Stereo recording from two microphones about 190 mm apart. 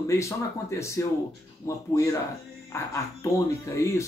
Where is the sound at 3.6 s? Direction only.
15° left (ahead or behind).